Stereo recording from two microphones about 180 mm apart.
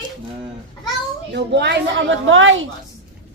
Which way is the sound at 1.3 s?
70° right (ahead or behind).